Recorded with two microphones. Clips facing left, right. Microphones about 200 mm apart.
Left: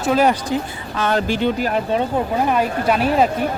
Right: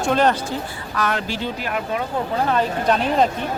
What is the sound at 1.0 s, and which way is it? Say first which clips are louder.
Speech: left 4 dB; 30° left (ahead or behind).